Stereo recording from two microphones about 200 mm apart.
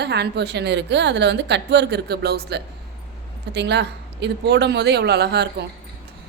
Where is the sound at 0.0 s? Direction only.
55° right (ahead or behind).